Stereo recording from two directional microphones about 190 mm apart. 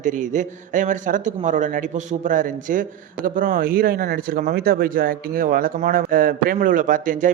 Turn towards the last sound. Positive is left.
turn(degrees=-45)  # may be behind; listen again after turning